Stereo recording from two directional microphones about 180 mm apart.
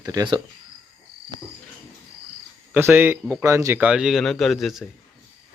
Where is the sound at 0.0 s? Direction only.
20° right (ahead or behind).